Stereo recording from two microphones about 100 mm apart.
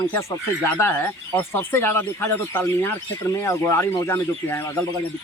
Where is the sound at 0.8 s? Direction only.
25° left (ahead or behind).